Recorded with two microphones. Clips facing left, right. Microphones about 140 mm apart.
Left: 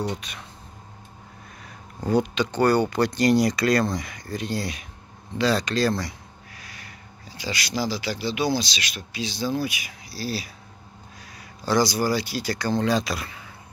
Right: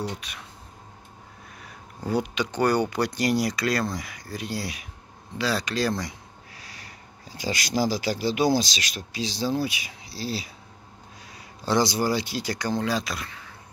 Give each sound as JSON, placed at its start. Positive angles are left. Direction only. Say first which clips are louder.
{"t": 0.2, "sound": "speech", "louder": "left 2 dB", "side_deg": -5}
{"t": 2.0, "sound": "speech", "louder": "left 4 dB", "side_deg": -10}
{"t": 6.5, "sound": "a sound", "louder": "left 1 dB", "side_deg": -30}
{"t": 7.3, "sound": "speech", "louder": "right 2 dB", "side_deg": -45}
{"t": 12.8, "sound": "speech", "louder": "left 4 dB", "side_deg": 0}